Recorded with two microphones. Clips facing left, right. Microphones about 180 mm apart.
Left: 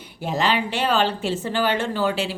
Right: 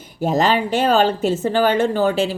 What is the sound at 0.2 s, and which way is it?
A woman's voice, 45° right (ahead or behind).